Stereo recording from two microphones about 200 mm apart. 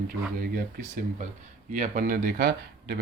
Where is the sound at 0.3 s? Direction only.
50° right (ahead or behind).